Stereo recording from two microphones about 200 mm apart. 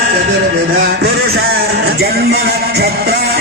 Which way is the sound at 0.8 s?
55° right (ahead or behind).